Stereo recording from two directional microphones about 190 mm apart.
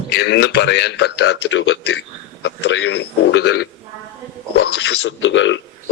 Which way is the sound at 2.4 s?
70° left (ahead or behind).